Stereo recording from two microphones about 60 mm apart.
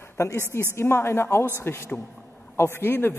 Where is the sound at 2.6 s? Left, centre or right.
Left.